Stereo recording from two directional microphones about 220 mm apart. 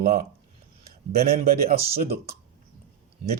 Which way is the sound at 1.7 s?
25° right (ahead or behind).